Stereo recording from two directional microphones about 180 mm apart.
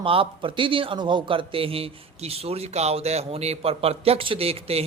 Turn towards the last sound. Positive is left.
turn(degrees=-35)  # may be behind; listen again after turning